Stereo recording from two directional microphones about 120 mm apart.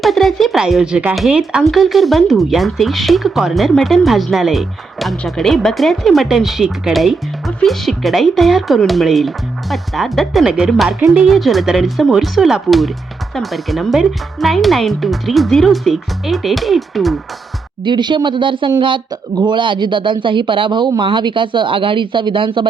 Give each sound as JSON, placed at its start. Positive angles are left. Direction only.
{"t": 0.0, "sound": "a woman's voice", "side_deg": 0}
{"t": 17.8, "sound": "speech", "side_deg": -40}